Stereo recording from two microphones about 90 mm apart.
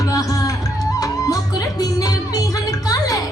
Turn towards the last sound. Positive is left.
turn(degrees=40)  # may be behind; listen again after turning